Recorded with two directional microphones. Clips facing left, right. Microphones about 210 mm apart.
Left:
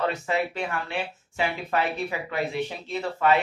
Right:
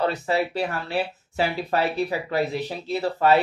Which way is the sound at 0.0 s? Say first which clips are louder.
Right 3 dB; 35° right (ahead or behind).